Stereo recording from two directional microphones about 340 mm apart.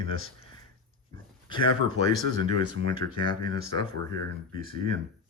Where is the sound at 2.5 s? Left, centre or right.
Left.